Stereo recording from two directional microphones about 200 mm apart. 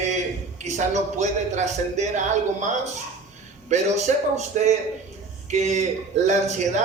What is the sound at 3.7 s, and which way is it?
A man's voice, 35° right (ahead or behind).